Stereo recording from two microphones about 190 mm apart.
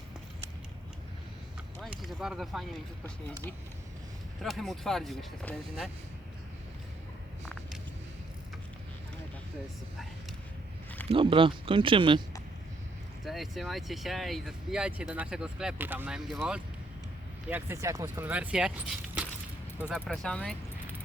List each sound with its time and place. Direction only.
1.8 s a sound: centre (ahead or behind)
4.4 s speech: centre (ahead or behind)
7.4 s vehicle: centre (ahead or behind)
11.1 s speech: 25° right (ahead or behind)
13.2 s speech: centre (ahead or behind)
19.9 s speech: centre (ahead or behind)